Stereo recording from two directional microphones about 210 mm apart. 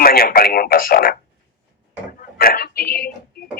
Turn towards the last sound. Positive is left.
turn(degrees=45)  # may be behind; listen again after turning